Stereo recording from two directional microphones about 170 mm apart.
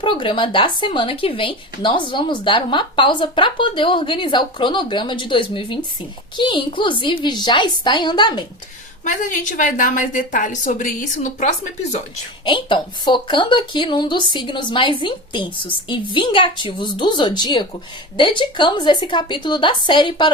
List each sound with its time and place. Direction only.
0.0 s speech: 30° left (ahead or behind)
9.0 s a woman's voice: 50° left (ahead or behind)
12.5 s speech: 30° left (ahead or behind)